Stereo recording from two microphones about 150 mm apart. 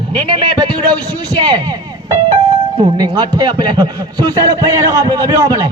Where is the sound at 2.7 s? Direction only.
25° right (ahead or behind).